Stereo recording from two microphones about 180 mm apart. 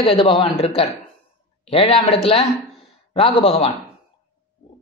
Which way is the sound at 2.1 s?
35° left (ahead or behind).